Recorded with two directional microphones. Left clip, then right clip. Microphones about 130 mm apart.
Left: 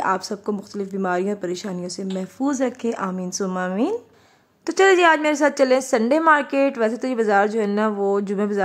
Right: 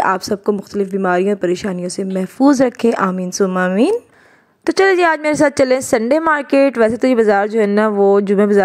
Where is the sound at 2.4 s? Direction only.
60° right (ahead or behind).